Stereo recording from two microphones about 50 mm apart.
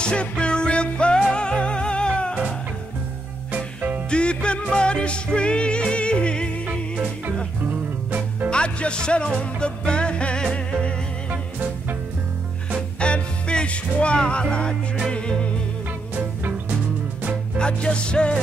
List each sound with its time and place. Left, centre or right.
0.0 s music: left
3.5 s music: right
4.1 s music: centre
8.5 s music: left
13.0 s music: left
17.6 s music: centre